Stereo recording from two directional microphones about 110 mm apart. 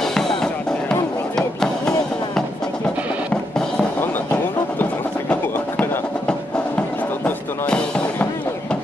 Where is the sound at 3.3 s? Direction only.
10° left (ahead or behind).